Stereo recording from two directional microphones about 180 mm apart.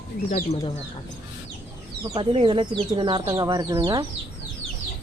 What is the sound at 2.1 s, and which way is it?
Speech, 30° right (ahead or behind).